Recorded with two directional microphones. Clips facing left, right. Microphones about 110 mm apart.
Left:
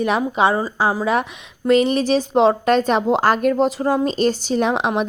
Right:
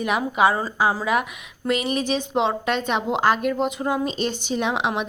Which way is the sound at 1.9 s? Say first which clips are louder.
Left 6 dB; 35° left (ahead or behind).